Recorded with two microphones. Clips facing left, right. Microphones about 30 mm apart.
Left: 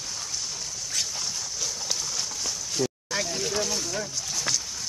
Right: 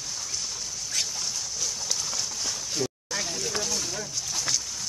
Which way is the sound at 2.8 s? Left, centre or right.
Centre.